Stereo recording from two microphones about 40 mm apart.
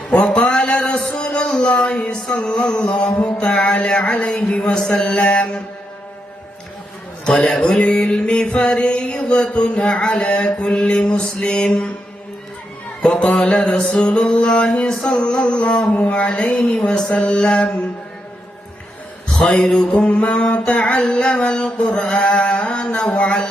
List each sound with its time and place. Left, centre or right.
0.1 s a sound: left
1.7 s speech: left
2.3 s mantra: left
4.2 s mantra: left
7.3 s a man's voice: centre
7.9 s mantra: left
13.0 s mantra: left
16.6 s mantra: centre
19.4 s mantra: left